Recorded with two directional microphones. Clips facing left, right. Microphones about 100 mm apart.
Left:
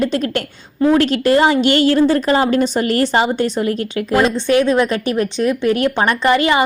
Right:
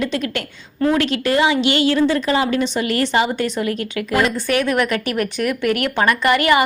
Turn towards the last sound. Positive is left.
turn(degrees=25)  # may be behind; listen again after turning